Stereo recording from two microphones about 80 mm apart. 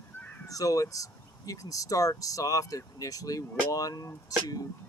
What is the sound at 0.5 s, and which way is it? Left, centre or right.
Speech, left.